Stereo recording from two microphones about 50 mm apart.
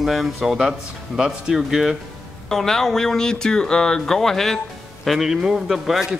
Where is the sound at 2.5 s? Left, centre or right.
Centre.